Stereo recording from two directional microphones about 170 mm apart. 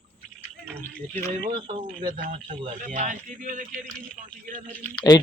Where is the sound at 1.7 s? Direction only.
30° right (ahead or behind).